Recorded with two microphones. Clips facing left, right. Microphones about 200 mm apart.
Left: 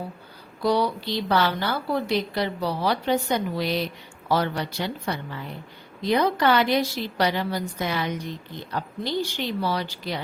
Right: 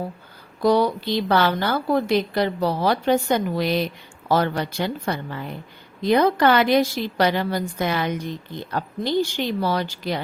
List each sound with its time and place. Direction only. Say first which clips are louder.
0.6 s a woman's voice: right 4 dB; 50° right (ahead or behind)